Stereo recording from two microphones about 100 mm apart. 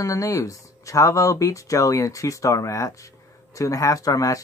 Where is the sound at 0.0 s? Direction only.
35° left (ahead or behind).